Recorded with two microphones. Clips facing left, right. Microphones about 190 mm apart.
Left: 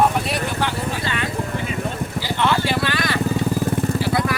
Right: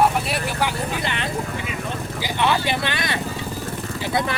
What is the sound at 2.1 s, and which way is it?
Vehicle, 15° right (ahead or behind).